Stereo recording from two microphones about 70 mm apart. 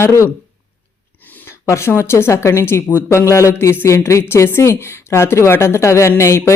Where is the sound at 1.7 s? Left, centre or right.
Left.